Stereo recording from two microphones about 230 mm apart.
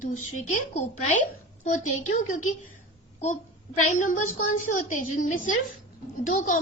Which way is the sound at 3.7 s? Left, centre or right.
Left.